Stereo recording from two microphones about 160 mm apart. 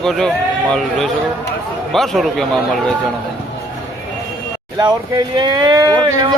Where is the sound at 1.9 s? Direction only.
Centre (ahead or behind).